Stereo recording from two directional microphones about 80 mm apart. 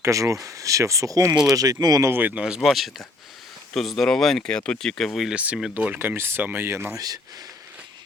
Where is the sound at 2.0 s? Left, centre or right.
Right.